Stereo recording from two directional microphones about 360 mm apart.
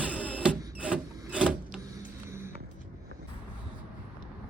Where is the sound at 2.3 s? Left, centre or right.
Centre.